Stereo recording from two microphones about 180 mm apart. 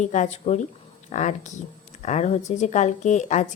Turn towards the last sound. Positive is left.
turn(degrees=40)  # may be behind; listen again after turning